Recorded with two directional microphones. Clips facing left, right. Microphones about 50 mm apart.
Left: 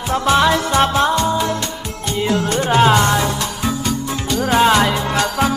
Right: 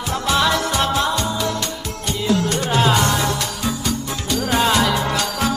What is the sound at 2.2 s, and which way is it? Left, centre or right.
Music, left.